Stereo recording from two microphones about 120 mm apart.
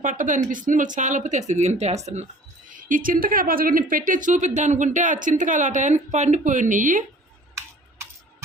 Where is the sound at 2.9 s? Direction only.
90° right.